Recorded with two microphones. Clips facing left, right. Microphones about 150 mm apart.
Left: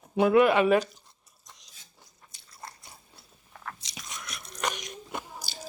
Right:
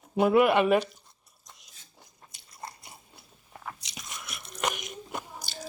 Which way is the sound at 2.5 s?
15° right (ahead or behind).